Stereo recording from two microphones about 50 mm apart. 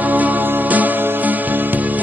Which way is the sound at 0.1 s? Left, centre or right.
Right.